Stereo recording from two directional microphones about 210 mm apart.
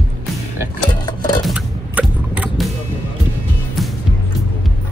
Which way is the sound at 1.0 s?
20° left (ahead or behind).